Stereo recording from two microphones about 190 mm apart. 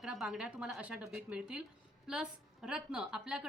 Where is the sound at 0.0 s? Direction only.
Centre (ahead or behind).